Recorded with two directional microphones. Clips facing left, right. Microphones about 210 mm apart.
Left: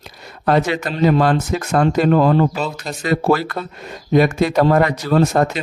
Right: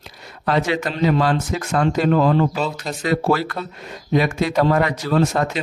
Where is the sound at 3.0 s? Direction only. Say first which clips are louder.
Left 2 dB; 45° left (ahead or behind).